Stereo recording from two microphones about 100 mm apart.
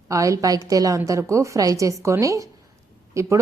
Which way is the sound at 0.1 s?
35° right (ahead or behind).